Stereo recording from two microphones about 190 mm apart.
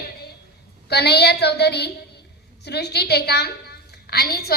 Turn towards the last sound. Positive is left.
turn(degrees=55)  # may be behind; listen again after turning